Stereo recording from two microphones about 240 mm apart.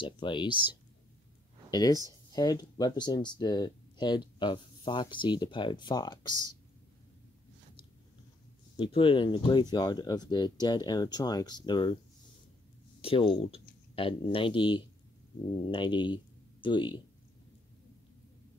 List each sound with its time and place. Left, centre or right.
0.0 s speech: centre
1.7 s speech: centre
8.7 s speech: left
13.0 s speech: left